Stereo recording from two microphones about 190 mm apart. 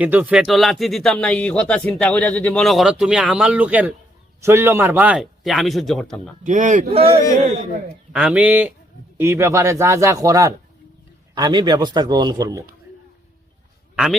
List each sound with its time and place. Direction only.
0.0 s speech: 5° right (ahead or behind)
6.4 s a man's voice: 40° right (ahead or behind)
8.1 s a man's voice: 5° right (ahead or behind)
13.9 s speech: centre (ahead or behind)